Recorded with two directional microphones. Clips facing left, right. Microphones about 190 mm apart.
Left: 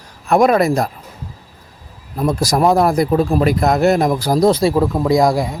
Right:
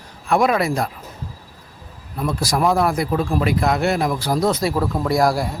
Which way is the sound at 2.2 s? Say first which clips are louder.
Left 5 dB; 40° left (ahead or behind).